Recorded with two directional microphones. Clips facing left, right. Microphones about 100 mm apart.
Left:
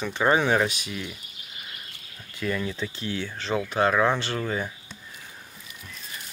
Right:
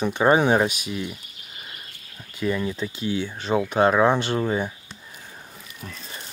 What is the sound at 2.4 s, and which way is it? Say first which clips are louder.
Speech: right 4 dB; 20° right (ahead or behind).